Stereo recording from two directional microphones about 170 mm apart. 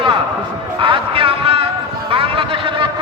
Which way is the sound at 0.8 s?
30° right (ahead or behind).